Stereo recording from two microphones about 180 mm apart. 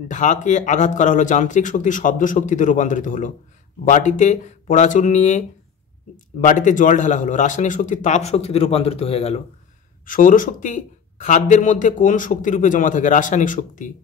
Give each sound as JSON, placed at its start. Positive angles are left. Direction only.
{"t": 0.1, "sound": "a man's voice", "side_deg": 45}
{"t": 10.0, "sound": "a man's voice", "side_deg": 50}